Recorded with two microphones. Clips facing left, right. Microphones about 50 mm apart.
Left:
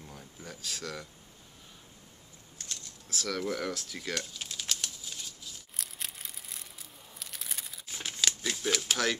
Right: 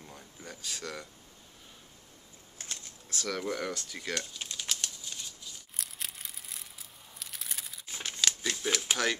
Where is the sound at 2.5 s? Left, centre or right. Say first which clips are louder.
Right 1 dB; right.